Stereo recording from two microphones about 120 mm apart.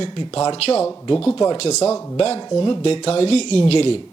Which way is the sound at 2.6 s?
45° left (ahead or behind).